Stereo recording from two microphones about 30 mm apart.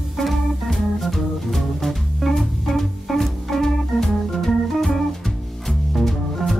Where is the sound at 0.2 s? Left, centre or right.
Centre.